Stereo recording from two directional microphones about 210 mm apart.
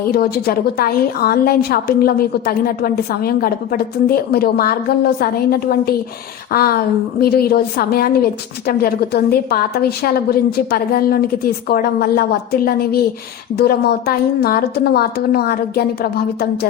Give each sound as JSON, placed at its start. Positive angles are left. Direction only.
{"t": 0.1, "sound": "a woman's voice", "side_deg": 45}